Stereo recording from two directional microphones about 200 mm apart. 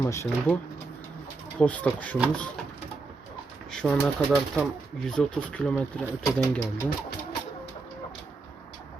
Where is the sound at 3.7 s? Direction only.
5° left (ahead or behind).